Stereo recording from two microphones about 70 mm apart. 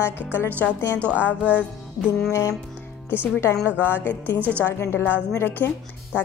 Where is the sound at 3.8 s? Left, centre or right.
Left.